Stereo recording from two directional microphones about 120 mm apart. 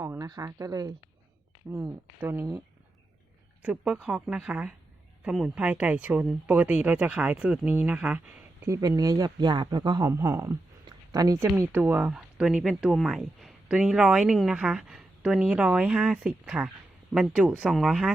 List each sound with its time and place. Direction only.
0.0 s speech: 30° right (ahead or behind)
1.7 s speech: 20° right (ahead or behind)
3.6 s speech: 10° right (ahead or behind)
8.6 s speech: 25° right (ahead or behind)
10.1 s speech: 25° right (ahead or behind)
10.8 s a sound: 30° right (ahead or behind)
11.3 s speech: 20° right (ahead or behind); by 18.1 s centre (ahead or behind)